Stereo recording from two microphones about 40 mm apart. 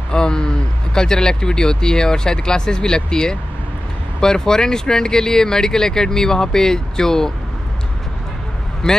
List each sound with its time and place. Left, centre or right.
0.1 s speech: centre
8.8 s speech: centre